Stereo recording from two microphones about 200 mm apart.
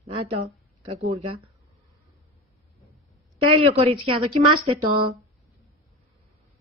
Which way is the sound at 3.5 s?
30° right (ahead or behind).